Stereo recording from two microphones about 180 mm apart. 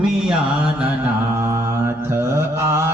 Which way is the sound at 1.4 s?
15° right (ahead or behind).